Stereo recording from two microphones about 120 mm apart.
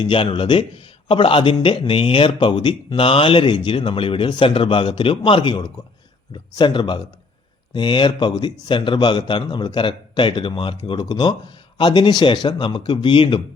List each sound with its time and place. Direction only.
0.0 s a man's voice: 45° left (ahead or behind)